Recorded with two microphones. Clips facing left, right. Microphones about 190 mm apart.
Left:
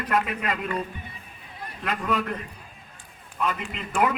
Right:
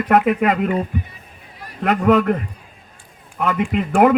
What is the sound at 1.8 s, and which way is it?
Speech, 65° right (ahead or behind).